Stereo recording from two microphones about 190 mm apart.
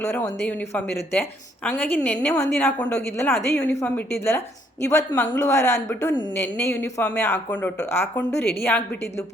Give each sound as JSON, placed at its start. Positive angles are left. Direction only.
{"t": 0.0, "sound": "a woman's voice", "side_deg": 15}
{"t": 8.3, "sound": "a woman's voice", "side_deg": 55}
{"t": 8.6, "sound": "a woman's voice", "side_deg": 10}